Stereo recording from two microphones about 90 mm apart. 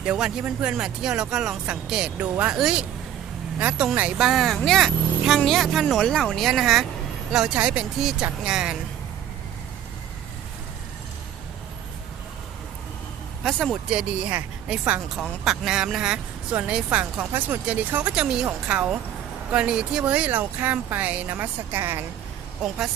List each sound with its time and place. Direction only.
0.0 s speech: 10° right (ahead or behind)
4.2 s speech: centre (ahead or behind)
13.4 s speech: 5° left (ahead or behind)
13.9 s speech: 15° right (ahead or behind)
15.1 s speech: centre (ahead or behind); by 22.0 s 25° right (ahead or behind)